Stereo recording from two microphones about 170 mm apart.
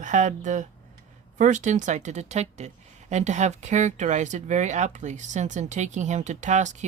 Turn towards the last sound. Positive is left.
turn(degrees=-45)  # may be behind; listen again after turning